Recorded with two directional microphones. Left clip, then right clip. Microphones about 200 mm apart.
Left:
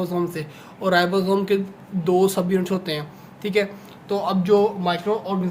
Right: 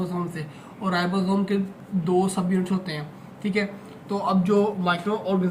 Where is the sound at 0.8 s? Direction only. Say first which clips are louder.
Left 7 dB; 55° left (ahead or behind).